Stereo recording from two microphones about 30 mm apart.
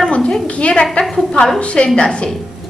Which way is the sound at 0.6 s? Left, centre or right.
Left.